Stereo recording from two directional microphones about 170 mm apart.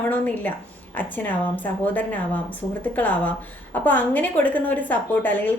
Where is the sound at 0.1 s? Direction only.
10° left (ahead or behind).